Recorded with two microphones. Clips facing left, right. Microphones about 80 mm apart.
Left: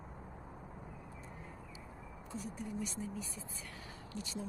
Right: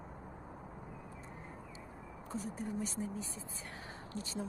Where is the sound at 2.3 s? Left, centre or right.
Right.